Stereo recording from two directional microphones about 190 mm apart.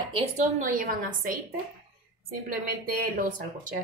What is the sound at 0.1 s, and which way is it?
A woman's voice, 35° right (ahead or behind).